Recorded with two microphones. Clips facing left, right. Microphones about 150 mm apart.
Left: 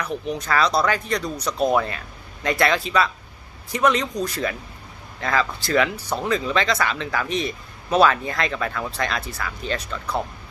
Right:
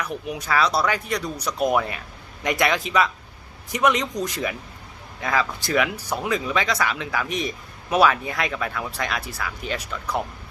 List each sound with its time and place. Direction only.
0.0 s speech: 10° right (ahead or behind)